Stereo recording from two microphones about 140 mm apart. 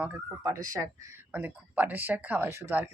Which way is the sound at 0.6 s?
25° right (ahead or behind).